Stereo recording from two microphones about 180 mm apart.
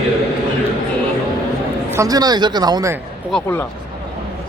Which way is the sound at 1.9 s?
20° right (ahead or behind).